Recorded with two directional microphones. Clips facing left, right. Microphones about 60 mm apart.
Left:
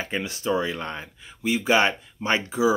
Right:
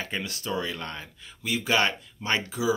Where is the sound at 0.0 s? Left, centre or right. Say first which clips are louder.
Left 5 dB; centre.